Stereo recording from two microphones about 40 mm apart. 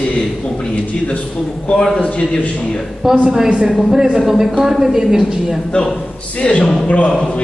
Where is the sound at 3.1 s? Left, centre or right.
Right.